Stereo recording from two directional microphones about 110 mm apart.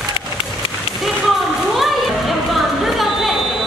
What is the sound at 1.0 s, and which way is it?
Music, centre (ahead or behind).